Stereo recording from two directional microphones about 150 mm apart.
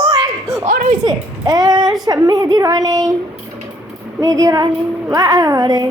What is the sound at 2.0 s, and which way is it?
A woman's voice, 25° right (ahead or behind).